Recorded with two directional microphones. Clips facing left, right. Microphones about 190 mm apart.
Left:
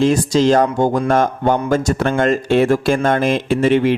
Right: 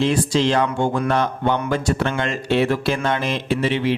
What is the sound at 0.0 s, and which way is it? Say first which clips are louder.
Speech: left 5 dB; 45° left (ahead or behind).